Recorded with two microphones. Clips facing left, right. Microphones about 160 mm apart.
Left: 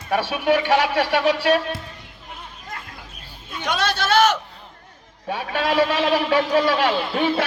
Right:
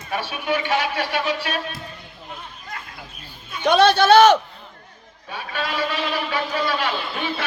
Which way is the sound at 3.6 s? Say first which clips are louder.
Right 9 dB; 60° right (ahead or behind).